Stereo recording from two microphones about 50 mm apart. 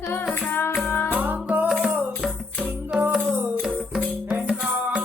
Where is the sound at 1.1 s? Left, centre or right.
Right.